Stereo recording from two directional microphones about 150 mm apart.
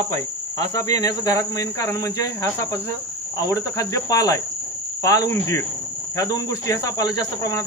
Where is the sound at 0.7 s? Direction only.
25° left (ahead or behind).